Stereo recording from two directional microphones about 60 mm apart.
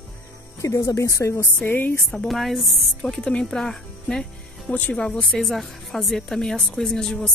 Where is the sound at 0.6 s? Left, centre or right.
Left.